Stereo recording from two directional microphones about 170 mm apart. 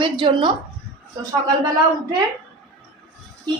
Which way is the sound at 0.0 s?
30° right (ahead or behind).